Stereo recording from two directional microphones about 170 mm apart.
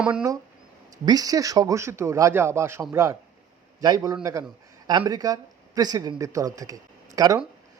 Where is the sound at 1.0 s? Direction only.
20° right (ahead or behind).